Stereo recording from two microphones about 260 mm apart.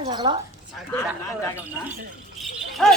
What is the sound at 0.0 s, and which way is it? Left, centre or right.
Speech, centre.